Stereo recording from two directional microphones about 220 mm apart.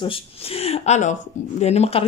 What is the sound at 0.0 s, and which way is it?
A woman's voice, 25° left (ahead or behind).